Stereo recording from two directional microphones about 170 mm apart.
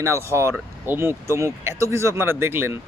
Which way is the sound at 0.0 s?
15° right (ahead or behind).